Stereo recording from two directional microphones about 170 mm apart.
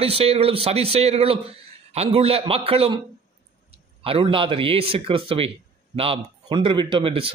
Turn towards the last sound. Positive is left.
turn(degrees=-30)  # may be behind; listen again after turning